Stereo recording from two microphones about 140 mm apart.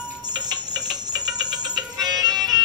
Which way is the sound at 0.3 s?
30° right (ahead or behind).